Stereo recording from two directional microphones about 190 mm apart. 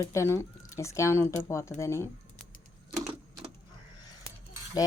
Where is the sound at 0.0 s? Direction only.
15° left (ahead or behind).